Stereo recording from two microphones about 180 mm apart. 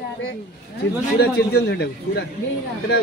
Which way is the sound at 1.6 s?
70° left (ahead or behind).